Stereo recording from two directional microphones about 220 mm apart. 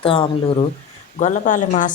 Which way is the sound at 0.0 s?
25° left (ahead or behind).